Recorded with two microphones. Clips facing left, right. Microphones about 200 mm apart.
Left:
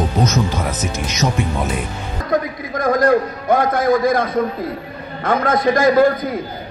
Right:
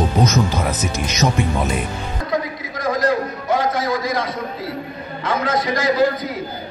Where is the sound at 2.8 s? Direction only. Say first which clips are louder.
Left 4 dB; 55° left (ahead or behind).